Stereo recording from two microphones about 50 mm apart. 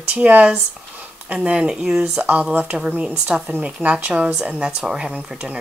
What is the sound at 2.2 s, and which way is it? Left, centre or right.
Speech, right.